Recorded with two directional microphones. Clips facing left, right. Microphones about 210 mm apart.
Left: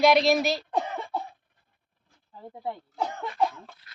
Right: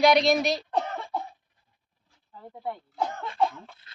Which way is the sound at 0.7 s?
10° left (ahead or behind).